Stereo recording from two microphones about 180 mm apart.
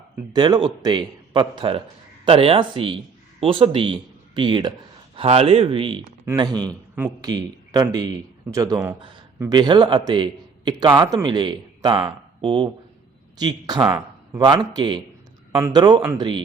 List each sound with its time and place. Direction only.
0.3 s a man's voice: 25° right (ahead or behind)
6.9 s a man's voice: 10° right (ahead or behind)
7.3 s speech: 20° right (ahead or behind)
9.0 s speech: 30° right (ahead or behind)